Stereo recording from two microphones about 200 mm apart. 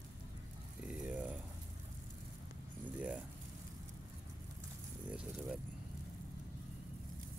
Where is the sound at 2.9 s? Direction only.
5° right (ahead or behind).